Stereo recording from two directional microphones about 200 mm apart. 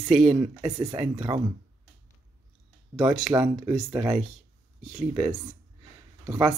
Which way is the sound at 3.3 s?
15° right (ahead or behind).